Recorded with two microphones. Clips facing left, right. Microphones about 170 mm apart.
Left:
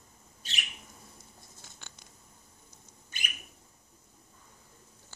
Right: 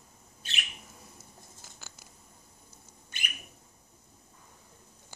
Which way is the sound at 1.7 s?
5° right (ahead or behind).